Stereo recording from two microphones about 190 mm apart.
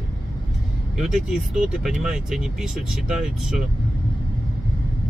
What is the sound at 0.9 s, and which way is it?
Speech, 5° right (ahead or behind).